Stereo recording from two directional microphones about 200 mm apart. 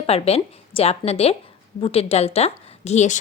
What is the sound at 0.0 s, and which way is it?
Speech, 30° left (ahead or behind).